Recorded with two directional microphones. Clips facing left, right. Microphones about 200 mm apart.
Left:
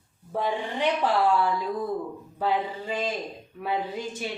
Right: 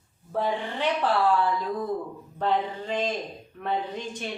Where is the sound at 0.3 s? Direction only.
15° left (ahead or behind).